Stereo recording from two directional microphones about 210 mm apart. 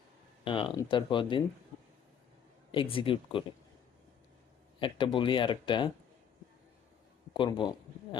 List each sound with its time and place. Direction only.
0.4 s speech: 25° left (ahead or behind)
2.7 s speech: 25° left (ahead or behind)
4.8 s speech: 25° left (ahead or behind)
7.3 s speech: 25° left (ahead or behind)